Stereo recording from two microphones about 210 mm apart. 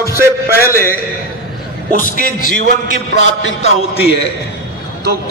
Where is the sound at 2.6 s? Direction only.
50° right (ahead or behind).